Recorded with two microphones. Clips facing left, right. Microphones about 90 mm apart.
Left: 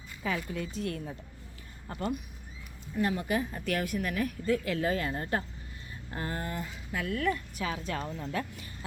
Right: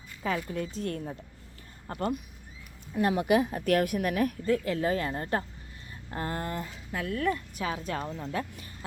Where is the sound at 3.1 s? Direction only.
80° right; by 4.3 s 55° right (ahead or behind).